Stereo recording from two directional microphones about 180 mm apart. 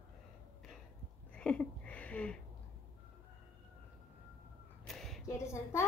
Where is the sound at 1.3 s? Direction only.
5° left (ahead or behind).